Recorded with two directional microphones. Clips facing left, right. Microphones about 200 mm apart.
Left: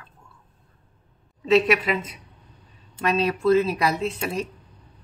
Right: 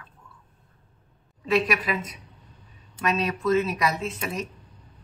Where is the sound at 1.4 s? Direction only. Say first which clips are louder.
Left 5 dB; 25° left (ahead or behind).